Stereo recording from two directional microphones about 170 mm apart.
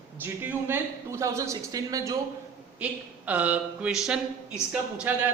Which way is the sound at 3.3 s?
10° right (ahead or behind).